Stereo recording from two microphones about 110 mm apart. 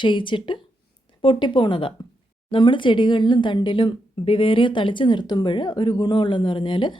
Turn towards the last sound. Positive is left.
turn(degrees=45)  # may be behind; listen again after turning